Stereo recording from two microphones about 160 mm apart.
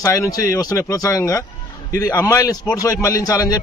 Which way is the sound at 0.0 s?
20° left (ahead or behind).